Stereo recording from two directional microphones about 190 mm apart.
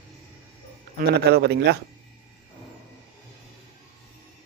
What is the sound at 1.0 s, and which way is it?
Speech, 60° right (ahead or behind).